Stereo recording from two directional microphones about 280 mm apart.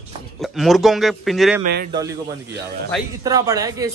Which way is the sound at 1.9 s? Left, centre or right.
Centre.